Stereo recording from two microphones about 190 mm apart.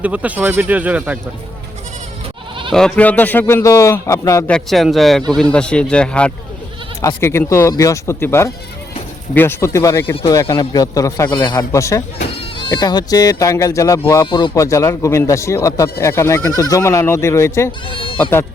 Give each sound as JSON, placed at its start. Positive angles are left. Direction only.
{"t": 0.0, "sound": "speech", "side_deg": -5}
{"t": 2.7, "sound": "speech", "side_deg": 5}
{"t": 4.5, "sound": "speech", "side_deg": 0}
{"t": 17.7, "sound": "speech", "side_deg": 25}
{"t": 18.2, "sound": "speech", "side_deg": 10}